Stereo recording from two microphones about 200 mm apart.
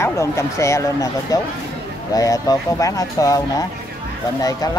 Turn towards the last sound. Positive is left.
turn(degrees=15)  # may be behind; listen again after turning